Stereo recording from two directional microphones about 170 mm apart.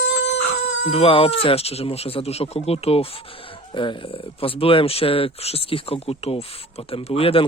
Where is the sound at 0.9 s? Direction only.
35° left (ahead or behind).